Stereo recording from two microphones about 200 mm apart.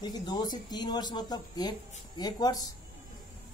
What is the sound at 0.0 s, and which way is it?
Speech, 20° left (ahead or behind).